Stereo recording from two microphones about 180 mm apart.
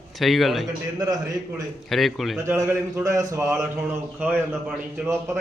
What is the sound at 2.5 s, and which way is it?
Speech, 15° right (ahead or behind).